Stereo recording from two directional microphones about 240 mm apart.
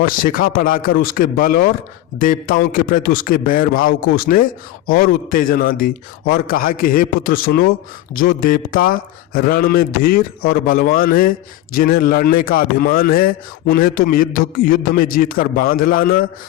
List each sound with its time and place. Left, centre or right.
0.0 s a man's voice: left